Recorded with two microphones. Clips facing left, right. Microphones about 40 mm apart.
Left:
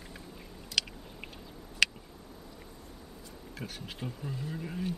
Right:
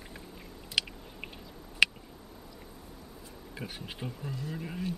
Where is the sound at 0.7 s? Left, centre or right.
Centre.